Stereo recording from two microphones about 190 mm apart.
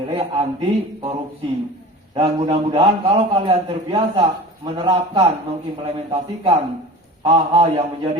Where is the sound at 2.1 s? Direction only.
30° right (ahead or behind).